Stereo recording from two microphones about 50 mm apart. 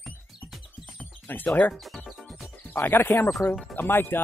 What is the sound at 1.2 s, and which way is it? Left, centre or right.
Speech, left.